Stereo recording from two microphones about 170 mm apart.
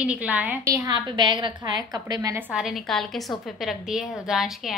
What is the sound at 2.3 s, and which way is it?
A woman's voice, 5° right (ahead or behind).